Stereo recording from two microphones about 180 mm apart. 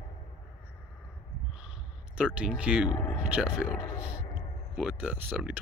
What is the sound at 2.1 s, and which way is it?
Speech, 5° right (ahead or behind).